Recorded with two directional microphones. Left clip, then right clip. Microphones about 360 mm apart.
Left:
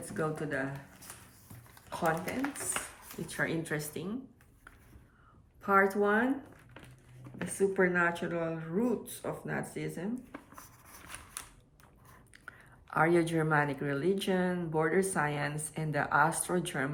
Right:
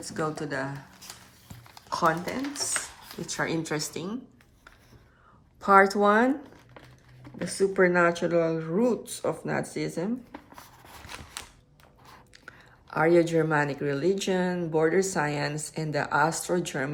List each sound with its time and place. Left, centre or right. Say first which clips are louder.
0.0 s speech: right 4 dB; centre
1.9 s speech: right 7 dB; centre
5.5 s speech: right 7 dB; centre
7.3 s speech: right 5 dB; centre
12.5 s speech: right 2 dB; centre